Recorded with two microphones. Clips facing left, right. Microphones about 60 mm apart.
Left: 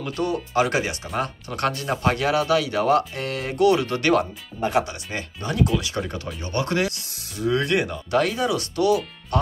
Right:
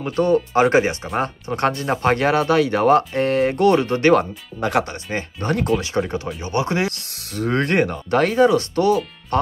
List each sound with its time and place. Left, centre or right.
0.0 s speech: right
4.6 s speech: right
4.8 s speech: right
5.8 s speech: right
6.9 s speech: right